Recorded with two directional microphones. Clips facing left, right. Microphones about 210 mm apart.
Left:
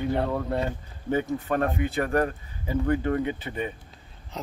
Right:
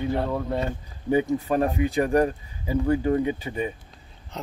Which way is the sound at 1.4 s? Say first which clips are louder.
Right 3 dB; 15° right (ahead or behind).